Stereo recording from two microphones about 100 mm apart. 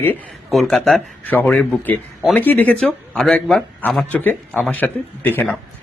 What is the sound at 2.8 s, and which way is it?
Speech, 5° left (ahead or behind).